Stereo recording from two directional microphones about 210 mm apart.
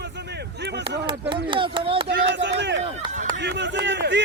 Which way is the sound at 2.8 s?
30° right (ahead or behind).